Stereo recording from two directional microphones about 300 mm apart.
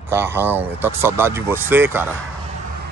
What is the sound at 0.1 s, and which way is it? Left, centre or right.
Speech, centre.